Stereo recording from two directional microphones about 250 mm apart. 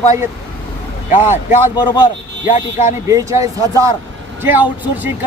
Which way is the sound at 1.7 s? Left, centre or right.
Centre.